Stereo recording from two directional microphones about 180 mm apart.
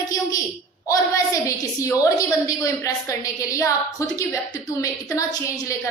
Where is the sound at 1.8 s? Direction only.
20° left (ahead or behind).